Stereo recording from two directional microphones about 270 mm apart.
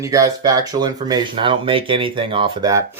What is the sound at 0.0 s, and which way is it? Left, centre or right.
Speech, centre.